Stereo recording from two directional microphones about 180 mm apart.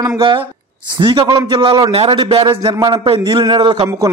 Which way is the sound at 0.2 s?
30° right (ahead or behind).